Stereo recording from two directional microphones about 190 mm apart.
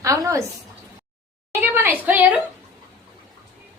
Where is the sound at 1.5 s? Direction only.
10° right (ahead or behind).